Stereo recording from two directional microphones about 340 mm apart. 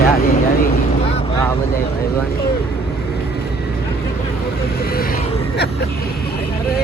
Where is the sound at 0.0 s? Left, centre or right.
Left.